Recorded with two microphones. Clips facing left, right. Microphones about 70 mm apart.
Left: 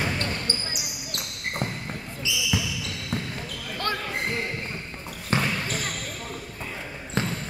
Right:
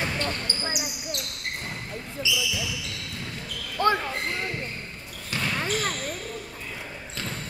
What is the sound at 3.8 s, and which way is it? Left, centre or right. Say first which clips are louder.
Basketball bounce: right 7 dB; right.